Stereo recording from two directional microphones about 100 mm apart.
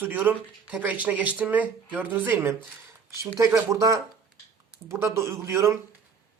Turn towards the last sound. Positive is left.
turn(degrees=-30)  # may be behind; listen again after turning